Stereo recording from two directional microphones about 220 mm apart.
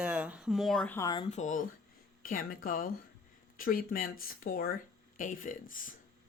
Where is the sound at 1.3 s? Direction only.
35° left (ahead or behind).